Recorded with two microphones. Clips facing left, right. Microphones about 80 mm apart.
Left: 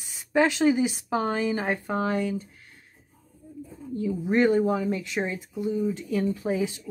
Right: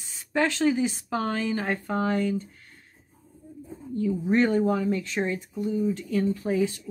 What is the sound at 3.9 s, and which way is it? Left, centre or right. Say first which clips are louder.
Speech: right 1 dB; centre.